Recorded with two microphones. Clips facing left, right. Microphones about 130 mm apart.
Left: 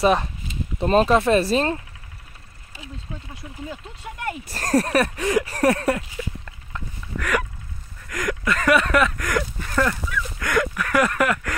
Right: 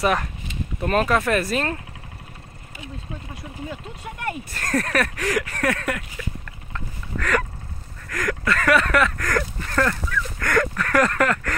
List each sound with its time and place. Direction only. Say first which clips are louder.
0.0 s speech: left 3 dB; 20° left (ahead or behind)
4.5 s speech: left 6 dB; 35° left (ahead or behind); by 7.4 s 10° left (ahead or behind)
8.1 s a sound: even; 15° left (ahead or behind)